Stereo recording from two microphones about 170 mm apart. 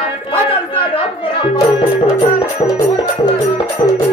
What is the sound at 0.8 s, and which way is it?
Speech, 30° left (ahead or behind).